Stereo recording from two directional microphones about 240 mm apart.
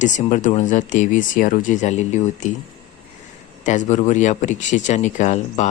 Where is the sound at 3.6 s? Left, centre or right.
Left.